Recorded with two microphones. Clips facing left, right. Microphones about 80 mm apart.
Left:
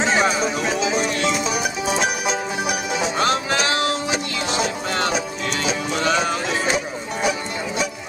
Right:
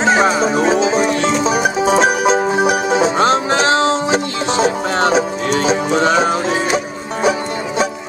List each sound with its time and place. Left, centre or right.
0.0 s music: right